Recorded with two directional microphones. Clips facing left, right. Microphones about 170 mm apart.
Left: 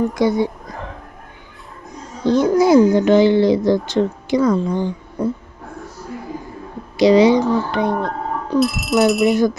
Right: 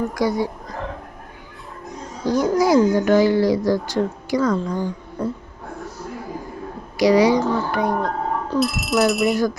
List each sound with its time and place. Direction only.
0.1 s a woman's voice: 25° left (ahead or behind)
2.2 s a woman's voice: 25° left (ahead or behind)
6.9 s a woman's voice: 25° left (ahead or behind)
8.5 s speech: centre (ahead or behind)